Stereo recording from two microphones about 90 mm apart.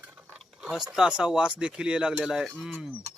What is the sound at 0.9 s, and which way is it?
Speech, 10° right (ahead or behind).